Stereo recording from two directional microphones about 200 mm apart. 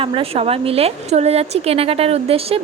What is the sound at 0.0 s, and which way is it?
A woman's voice, 25° right (ahead or behind).